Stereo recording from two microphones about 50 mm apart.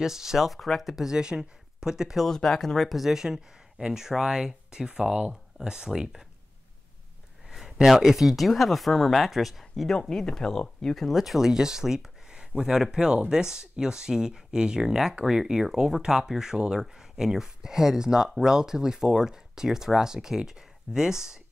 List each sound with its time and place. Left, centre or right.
0.0 s speech: centre
1.1 s speech: centre
2.1 s speech: centre
7.4 s speech: centre
10.0 s speech: centre
11.1 s speech: centre